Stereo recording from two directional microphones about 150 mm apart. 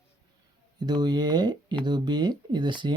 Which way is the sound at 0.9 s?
30° right (ahead or behind).